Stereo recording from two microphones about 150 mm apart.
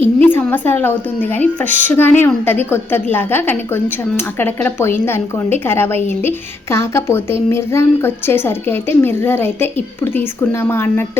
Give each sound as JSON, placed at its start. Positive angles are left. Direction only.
{"t": 0.2, "sound": "a woman's voice", "side_deg": 10}